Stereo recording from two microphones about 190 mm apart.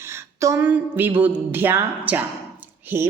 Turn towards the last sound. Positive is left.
turn(degrees=-10)  # may be behind; listen again after turning